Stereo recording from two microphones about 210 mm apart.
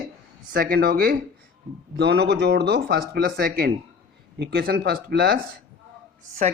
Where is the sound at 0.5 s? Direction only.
45° right (ahead or behind).